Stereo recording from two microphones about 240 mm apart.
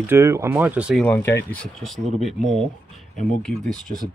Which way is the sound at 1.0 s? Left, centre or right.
Centre.